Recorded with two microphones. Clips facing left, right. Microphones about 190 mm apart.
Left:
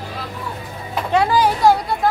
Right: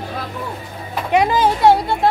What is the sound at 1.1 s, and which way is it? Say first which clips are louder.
A child's voice: right 1 dB; 20° right (ahead or behind).